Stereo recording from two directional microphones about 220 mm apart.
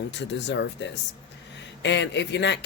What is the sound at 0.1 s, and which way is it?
Speech, 50° left (ahead or behind).